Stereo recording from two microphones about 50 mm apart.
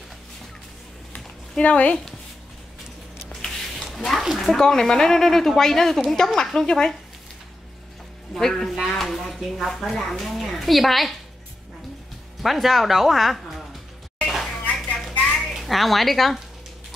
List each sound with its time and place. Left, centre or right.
1.6 s speech: left
3.4 s a sound: centre
4.2 s speech: centre
4.6 s a woman's voice: centre
8.4 s a woman's voice: centre
8.8 s a sound: centre
9.4 s a woman's voice: centre
12.4 s a woman's voice: centre
14.2 s a sound: centre
15.3 s a child's voice: centre